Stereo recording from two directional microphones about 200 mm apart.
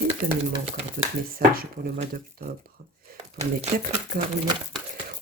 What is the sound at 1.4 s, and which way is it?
Speech, 45° right (ahead or behind).